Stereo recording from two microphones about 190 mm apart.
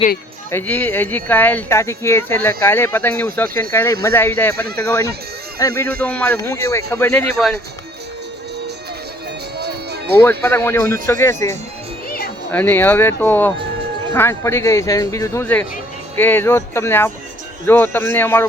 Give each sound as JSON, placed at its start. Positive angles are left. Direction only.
{"t": 0.5, "sound": "speech", "side_deg": 10}
{"t": 9.6, "sound": "music", "side_deg": -60}
{"t": 10.2, "sound": "speech", "side_deg": 10}
{"t": 12.0, "sound": "music", "side_deg": 55}
{"t": 12.5, "sound": "speech", "side_deg": 10}